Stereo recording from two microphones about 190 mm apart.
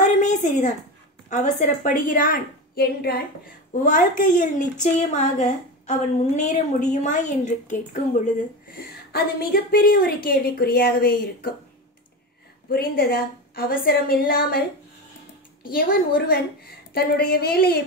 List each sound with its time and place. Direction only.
0.0 s a sound: 40° left (ahead or behind)
1.3 s a woman's voice: 40° left (ahead or behind)
3.8 s a woman's voice: 45° left (ahead or behind)
12.6 s a woman's voice: 50° left (ahead or behind)
15.7 s a woman's voice: 50° left (ahead or behind)